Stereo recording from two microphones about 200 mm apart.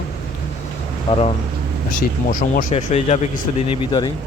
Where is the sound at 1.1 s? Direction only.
25° left (ahead or behind).